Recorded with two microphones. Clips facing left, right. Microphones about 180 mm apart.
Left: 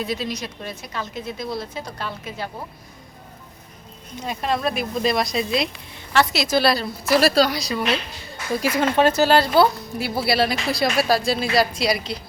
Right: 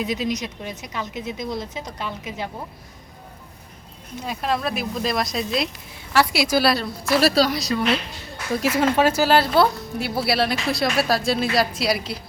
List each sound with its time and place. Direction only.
0.0 s speech: 15° right (ahead or behind)
4.2 s speech: centre (ahead or behind)